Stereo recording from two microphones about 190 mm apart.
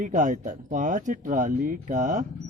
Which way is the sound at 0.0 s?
40° right (ahead or behind).